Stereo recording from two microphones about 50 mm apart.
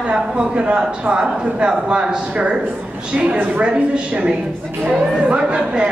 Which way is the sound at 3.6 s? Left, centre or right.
Centre.